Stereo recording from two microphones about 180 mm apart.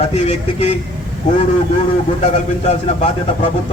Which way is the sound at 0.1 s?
35° left (ahead or behind).